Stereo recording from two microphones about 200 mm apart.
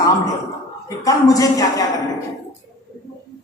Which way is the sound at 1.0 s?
15° left (ahead or behind).